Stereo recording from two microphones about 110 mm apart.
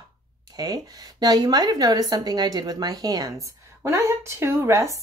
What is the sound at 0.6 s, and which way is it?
Speech, 35° right (ahead or behind).